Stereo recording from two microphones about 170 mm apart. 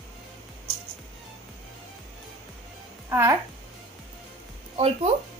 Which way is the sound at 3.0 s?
15° right (ahead or behind).